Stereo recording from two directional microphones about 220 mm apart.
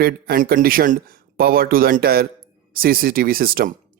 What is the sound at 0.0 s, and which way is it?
Speech, 45° right (ahead or behind).